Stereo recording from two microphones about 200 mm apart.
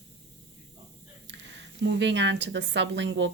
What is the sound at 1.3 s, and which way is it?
A woman's voice, 60° right (ahead or behind).